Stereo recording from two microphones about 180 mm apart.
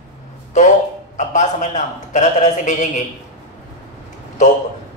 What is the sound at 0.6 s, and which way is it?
Speech, 40° left (ahead or behind).